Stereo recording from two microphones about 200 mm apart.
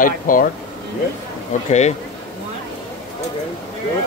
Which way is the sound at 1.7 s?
35° left (ahead or behind).